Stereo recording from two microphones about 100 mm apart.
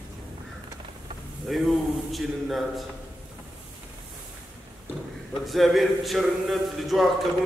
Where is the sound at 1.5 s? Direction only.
Centre (ahead or behind).